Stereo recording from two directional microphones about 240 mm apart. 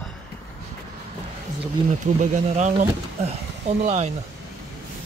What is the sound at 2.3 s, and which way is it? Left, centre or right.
Speech, right.